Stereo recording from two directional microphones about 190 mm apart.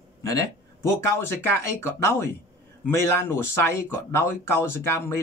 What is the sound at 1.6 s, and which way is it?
Speech, 15° left (ahead or behind).